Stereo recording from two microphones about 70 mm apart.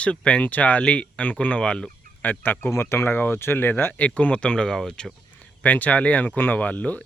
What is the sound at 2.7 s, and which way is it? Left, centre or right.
Speech, left.